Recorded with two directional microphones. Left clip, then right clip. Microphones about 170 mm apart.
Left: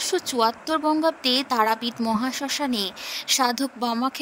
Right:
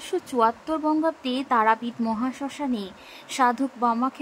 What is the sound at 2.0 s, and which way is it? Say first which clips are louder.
Speech: left 3 dB; 50° left (ahead or behind).